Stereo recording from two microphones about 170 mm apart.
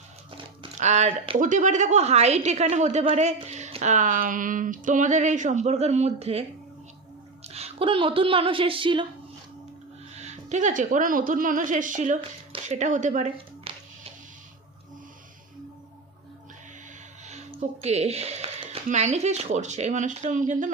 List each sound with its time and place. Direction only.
0.8 s a woman's voice: 45° right (ahead or behind)
7.4 s a woman's voice: 40° right (ahead or behind)
10.2 s a woman's voice: 40° right (ahead or behind)
13.3 s a sound: 35° right (ahead or behind)
17.2 s speech: 40° right (ahead or behind)